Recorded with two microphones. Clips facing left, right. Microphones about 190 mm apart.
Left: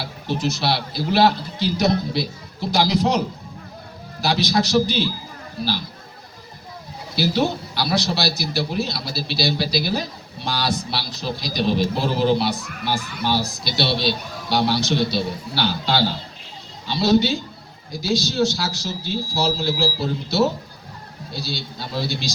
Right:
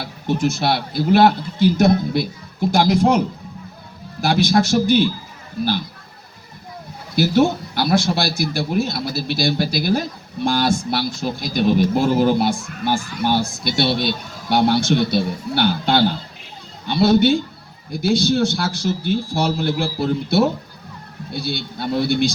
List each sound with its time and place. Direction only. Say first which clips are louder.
0.0 s a man's voice: right 4 dB; 50° right (ahead or behind)
4.2 s a man's voice: right 4 dB; 50° right (ahead or behind)
7.2 s a man's voice: right 5 dB; 50° right (ahead or behind)